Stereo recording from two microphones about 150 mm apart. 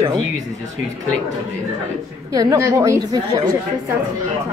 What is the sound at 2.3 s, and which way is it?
A woman's voice, 20° right (ahead or behind).